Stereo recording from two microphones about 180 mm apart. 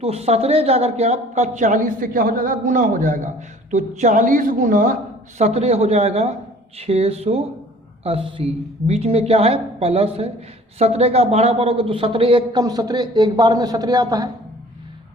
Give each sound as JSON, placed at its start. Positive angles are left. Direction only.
{"t": 0.0, "sound": "speech", "side_deg": -35}
{"t": 5.4, "sound": "a woman's voice", "side_deg": -35}